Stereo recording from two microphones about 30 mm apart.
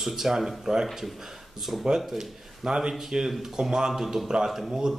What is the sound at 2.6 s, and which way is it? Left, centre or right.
Speech, right.